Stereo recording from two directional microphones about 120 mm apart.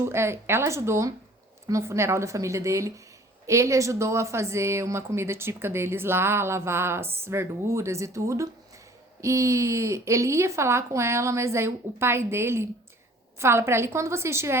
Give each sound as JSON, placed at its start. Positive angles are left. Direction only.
{"t": 0.0, "sound": "a woman's voice", "side_deg": -20}